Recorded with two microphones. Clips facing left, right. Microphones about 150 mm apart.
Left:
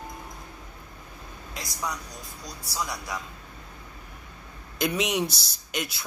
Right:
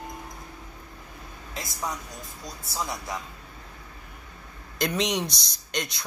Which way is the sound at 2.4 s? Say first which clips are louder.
Even; 25° right (ahead or behind).